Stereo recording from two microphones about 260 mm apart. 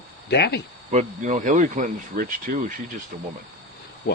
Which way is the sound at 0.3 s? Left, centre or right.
Left.